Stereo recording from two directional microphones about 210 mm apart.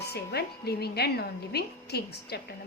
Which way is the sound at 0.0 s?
50° left (ahead or behind).